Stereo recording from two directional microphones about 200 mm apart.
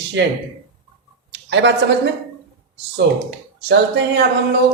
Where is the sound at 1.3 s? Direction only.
65° right (ahead or behind).